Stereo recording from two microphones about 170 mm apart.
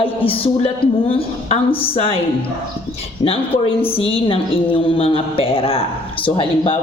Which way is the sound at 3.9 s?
35° left (ahead or behind).